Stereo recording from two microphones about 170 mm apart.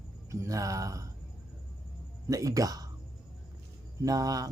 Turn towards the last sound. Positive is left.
turn(degrees=-20)  # may be behind; listen again after turning